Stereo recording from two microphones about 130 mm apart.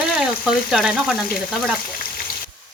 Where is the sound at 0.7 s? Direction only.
5° right (ahead or behind).